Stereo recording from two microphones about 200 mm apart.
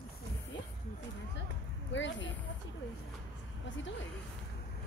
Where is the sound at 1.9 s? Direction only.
65° left (ahead or behind).